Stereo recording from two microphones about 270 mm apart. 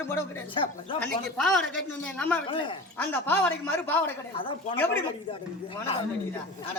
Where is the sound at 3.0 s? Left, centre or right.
Centre.